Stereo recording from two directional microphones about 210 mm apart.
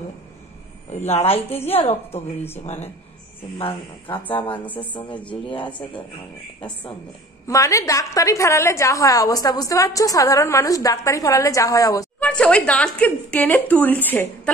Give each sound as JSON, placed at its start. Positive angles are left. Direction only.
{"t": 1.0, "sound": "speech", "side_deg": 30}
{"t": 3.5, "sound": "speech", "side_deg": 25}
{"t": 7.4, "sound": "a woman's voice", "side_deg": 15}
{"t": 12.2, "sound": "a woman's voice", "side_deg": 5}